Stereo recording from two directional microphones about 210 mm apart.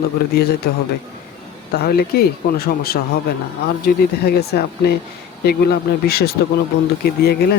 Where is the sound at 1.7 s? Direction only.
50° left (ahead or behind).